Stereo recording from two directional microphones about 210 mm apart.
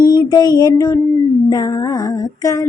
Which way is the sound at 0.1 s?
20° left (ahead or behind).